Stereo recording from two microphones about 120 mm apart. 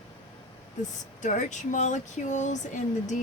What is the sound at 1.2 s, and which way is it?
Speech, 90° left.